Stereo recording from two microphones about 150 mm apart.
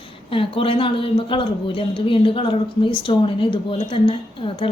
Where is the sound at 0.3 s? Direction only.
35° left (ahead or behind).